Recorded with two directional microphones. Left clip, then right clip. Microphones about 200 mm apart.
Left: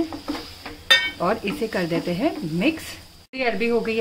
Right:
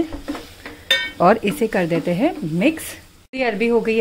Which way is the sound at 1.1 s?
30° right (ahead or behind).